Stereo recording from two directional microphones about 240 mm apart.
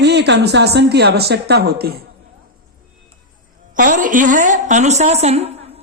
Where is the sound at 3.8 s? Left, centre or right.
Right.